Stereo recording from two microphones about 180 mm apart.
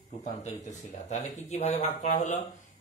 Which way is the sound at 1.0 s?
40° left (ahead or behind).